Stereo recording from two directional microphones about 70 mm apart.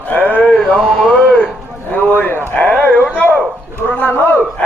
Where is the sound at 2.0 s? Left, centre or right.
Centre.